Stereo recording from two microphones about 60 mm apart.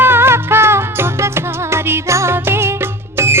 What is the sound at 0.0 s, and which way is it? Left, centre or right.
Music, right.